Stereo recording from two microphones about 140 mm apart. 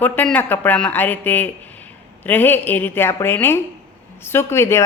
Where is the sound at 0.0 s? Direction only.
10° left (ahead or behind).